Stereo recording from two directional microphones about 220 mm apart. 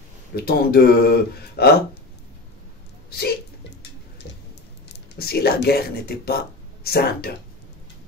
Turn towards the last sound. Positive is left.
turn(degrees=45)  # may be behind; listen again after turning